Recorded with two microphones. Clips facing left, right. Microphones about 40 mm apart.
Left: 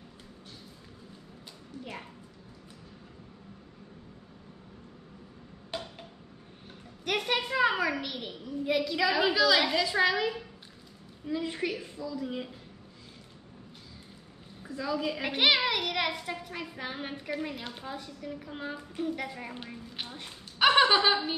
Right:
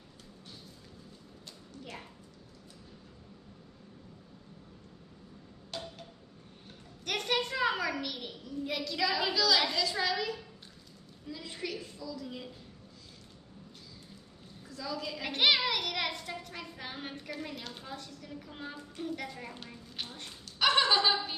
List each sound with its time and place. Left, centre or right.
5.7 s a sound: left
7.1 s a child's voice: centre
14.6 s a child's voice: left